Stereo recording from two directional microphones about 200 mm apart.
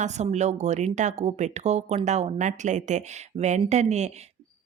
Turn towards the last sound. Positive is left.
turn(degrees=-35)  # may be behind; listen again after turning